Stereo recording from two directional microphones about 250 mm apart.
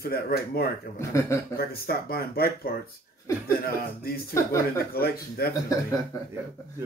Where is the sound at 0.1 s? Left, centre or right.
Left.